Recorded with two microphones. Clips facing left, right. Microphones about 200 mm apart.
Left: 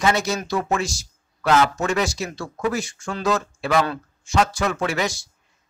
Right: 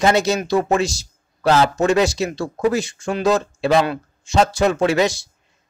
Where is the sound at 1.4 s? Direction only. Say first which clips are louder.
Right 3 dB; 30° right (ahead or behind).